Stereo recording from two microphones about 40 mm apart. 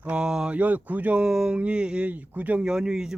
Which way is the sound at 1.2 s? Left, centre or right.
Centre.